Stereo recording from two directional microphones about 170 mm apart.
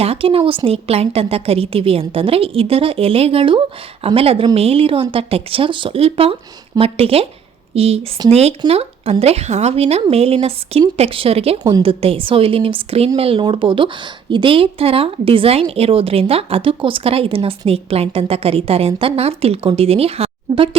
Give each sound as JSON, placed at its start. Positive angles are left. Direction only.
{"t": 0.0, "sound": "a woman's voice", "side_deg": -35}